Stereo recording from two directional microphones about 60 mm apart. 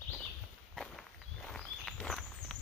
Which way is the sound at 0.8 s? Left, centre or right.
Centre.